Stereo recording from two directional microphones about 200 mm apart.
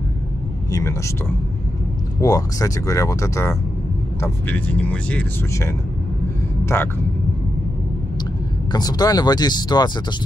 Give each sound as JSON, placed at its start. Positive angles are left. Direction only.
{"t": 0.7, "sound": "speech", "side_deg": 15}
{"t": 2.1, "sound": "speech", "side_deg": 15}
{"t": 8.7, "sound": "speech", "side_deg": 20}